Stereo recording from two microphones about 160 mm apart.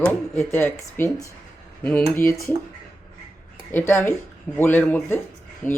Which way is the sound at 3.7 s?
15° left (ahead or behind).